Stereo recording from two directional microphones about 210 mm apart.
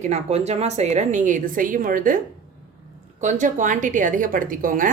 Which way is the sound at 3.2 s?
35° right (ahead or behind).